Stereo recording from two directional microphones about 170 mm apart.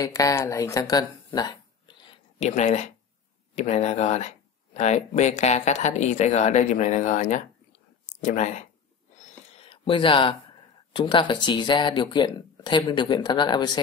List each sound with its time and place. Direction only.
0.0 s speech: 20° left (ahead or behind)
2.4 s a man's voice: 45° left (ahead or behind)
9.6 s a sound: 30° left (ahead or behind)
10.9 s speech: 30° left (ahead or behind)